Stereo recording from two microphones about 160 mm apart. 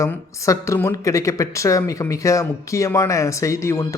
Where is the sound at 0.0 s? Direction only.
20° left (ahead or behind).